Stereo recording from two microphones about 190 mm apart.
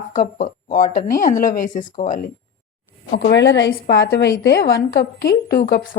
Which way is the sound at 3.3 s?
65° left (ahead or behind).